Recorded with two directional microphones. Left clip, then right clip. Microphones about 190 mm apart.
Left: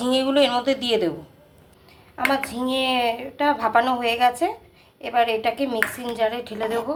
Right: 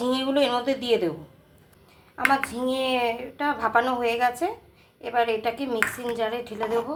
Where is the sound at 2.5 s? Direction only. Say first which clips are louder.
Left 2 dB; 15° left (ahead or behind).